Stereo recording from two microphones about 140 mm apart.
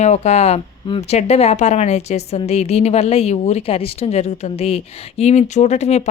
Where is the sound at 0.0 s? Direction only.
55° left (ahead or behind).